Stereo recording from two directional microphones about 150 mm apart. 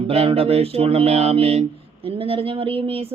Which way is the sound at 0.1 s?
40° right (ahead or behind).